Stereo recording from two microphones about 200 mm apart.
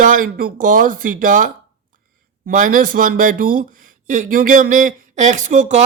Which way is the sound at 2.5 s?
40° right (ahead or behind).